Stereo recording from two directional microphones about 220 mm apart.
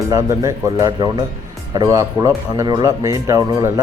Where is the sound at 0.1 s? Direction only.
15° right (ahead or behind).